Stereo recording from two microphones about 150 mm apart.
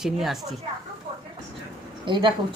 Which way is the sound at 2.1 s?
30° right (ahead or behind).